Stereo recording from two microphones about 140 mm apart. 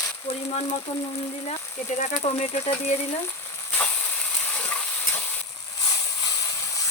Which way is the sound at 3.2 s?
15° left (ahead or behind).